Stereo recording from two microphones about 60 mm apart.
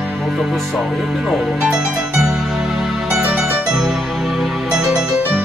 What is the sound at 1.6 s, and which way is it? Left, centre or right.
Music, centre.